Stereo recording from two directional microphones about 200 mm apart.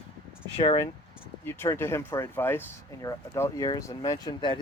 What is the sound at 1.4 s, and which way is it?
Speech, 10° left (ahead or behind).